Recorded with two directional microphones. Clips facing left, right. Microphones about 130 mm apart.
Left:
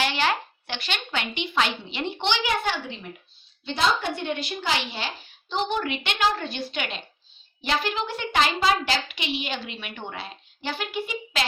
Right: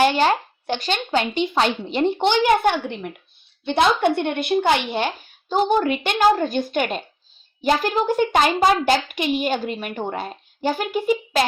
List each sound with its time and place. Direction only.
0.0 s a child's voice: 45° right (ahead or behind)